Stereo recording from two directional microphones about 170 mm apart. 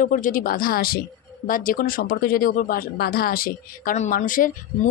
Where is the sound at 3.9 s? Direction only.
45° left (ahead or behind).